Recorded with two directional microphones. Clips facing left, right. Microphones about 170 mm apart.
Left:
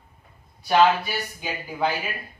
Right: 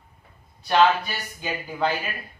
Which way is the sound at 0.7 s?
10° left (ahead or behind).